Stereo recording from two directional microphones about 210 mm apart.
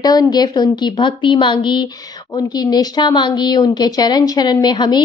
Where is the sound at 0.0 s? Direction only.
20° left (ahead or behind).